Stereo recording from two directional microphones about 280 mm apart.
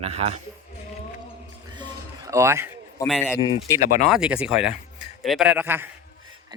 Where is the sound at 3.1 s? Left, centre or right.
Centre.